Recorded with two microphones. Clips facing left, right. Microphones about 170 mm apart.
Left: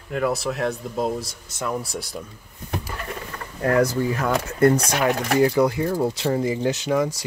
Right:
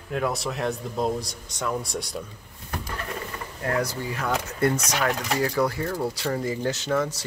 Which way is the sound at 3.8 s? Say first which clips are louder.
Left 7 dB; 50° left (ahead or behind).